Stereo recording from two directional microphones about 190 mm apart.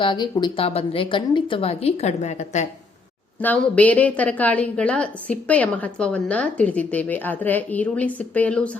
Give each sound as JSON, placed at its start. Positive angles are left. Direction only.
{"t": 0.0, "sound": "a woman's voice", "side_deg": 25}
{"t": 3.4, "sound": "a woman's voice", "side_deg": 10}